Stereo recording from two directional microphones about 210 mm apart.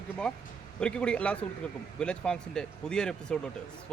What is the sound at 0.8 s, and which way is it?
Speech, 5° left (ahead or behind).